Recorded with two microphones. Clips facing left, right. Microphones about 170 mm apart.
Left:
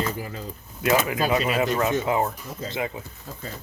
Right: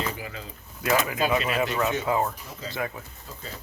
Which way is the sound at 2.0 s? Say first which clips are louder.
Left 2 dB; 20° left (ahead or behind).